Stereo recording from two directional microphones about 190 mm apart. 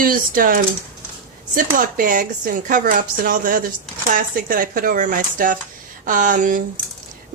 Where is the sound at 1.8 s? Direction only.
45° right (ahead or behind).